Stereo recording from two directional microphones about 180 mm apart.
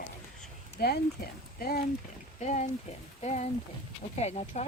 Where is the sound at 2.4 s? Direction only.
40° left (ahead or behind).